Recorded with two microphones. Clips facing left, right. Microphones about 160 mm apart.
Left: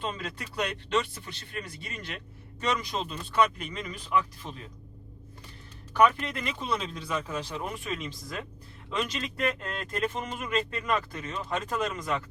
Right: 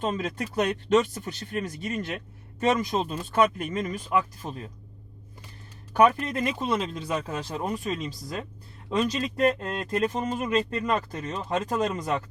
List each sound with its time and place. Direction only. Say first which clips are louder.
0.0 s speech: right 7 dB; 45° right (ahead or behind)
5.9 s speech: right 3 dB; 45° right (ahead or behind)